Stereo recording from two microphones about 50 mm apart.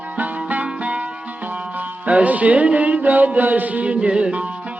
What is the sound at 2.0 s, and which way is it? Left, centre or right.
Music, right.